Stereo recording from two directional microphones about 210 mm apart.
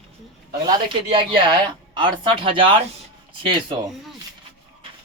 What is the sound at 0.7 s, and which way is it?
Speech, 20° right (ahead or behind).